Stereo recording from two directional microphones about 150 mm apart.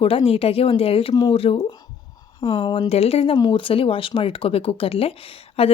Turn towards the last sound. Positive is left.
turn(degrees=40)  # may be behind; listen again after turning